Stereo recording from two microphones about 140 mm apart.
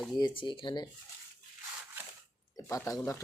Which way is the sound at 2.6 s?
20° left (ahead or behind).